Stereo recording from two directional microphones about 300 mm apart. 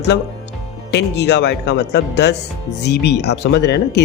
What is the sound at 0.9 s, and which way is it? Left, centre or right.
Speech, left.